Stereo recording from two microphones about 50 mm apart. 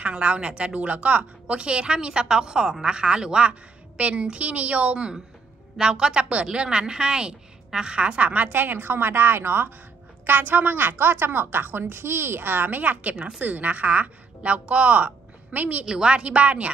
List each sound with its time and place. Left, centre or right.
0.0 s a woman's voice: right
15.8 s speech: centre